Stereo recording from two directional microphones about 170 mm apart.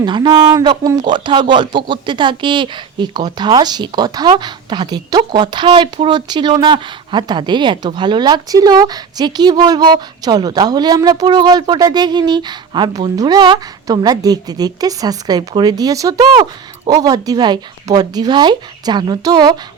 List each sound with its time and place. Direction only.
0.0 s speech: 25° right (ahead or behind)